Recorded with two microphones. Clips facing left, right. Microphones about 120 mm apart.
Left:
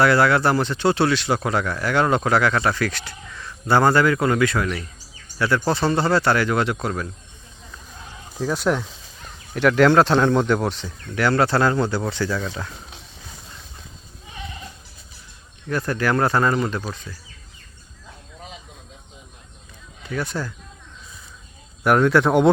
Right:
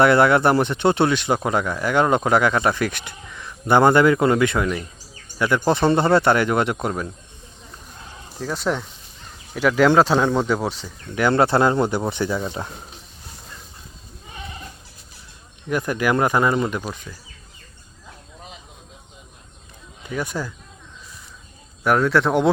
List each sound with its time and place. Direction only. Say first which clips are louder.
0.0 s speech: right 2 dB; 20° right (ahead or behind)
8.4 s speech: left 2 dB; centre (ahead or behind)
11.1 s speech: right 2 dB; 20° right (ahead or behind)
15.7 s speech: right 1 dB; 15° right (ahead or behind)
20.1 s speech: even; 15° right (ahead or behind)
21.8 s speech: left 2 dB; centre (ahead or behind)